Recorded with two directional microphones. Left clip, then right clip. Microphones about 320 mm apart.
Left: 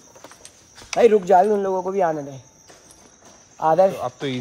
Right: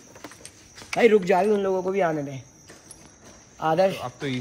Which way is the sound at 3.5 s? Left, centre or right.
Left.